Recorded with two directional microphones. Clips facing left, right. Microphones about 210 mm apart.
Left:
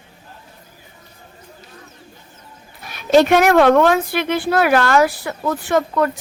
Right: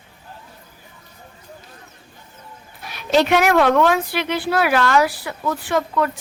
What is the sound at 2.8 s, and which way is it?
Speech, 50° left (ahead or behind).